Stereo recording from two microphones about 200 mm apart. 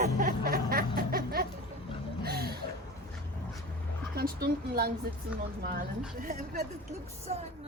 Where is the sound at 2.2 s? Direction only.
50° right (ahead or behind).